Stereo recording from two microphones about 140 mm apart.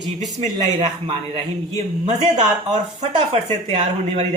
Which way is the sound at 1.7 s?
55° right (ahead or behind).